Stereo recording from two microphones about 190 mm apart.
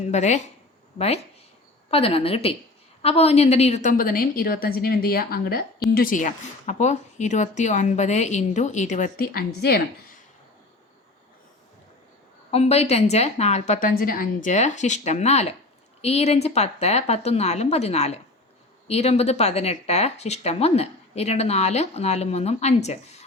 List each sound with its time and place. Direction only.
0.0 s a woman's voice: 35° left (ahead or behind); by 9.8 s 55° left (ahead or behind)
12.5 s speech: 35° left (ahead or behind)